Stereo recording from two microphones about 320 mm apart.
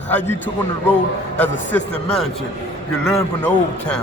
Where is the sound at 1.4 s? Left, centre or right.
Centre.